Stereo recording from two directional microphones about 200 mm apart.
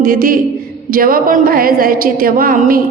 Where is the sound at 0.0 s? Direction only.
45° right (ahead or behind).